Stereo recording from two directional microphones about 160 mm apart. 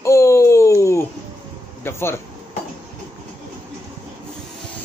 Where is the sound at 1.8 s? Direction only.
15° left (ahead or behind).